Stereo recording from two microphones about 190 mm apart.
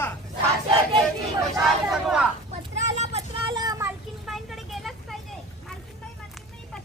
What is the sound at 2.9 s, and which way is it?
Vehicle, 30° right (ahead or behind).